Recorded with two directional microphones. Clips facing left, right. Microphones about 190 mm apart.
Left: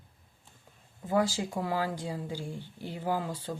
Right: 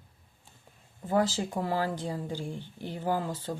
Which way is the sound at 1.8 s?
10° left (ahead or behind).